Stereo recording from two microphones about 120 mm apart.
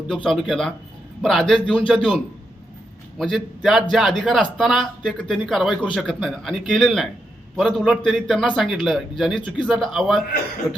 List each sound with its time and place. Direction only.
0.1 s a man's voice: 5° left (ahead or behind)
9.3 s a man's voice: 40° left (ahead or behind)
9.6 s a man's voice: centre (ahead or behind)